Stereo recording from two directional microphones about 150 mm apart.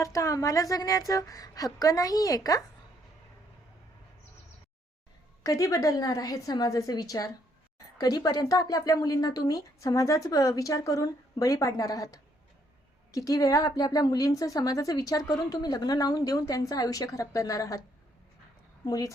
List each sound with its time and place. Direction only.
0.0 s a woman's voice: 20° left (ahead or behind)
5.4 s a woman's voice: 20° left (ahead or behind)
18.9 s a woman's voice: 25° left (ahead or behind)